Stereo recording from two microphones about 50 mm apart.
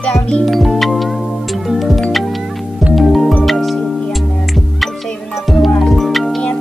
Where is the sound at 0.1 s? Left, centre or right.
Centre.